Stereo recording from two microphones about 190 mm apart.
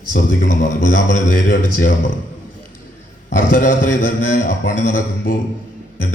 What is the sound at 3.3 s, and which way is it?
A man's voice, 45° left (ahead or behind).